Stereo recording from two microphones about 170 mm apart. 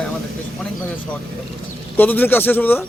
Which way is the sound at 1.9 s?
10° left (ahead or behind).